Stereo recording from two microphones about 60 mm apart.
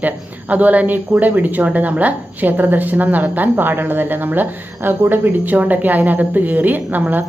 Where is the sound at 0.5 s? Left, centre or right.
Right.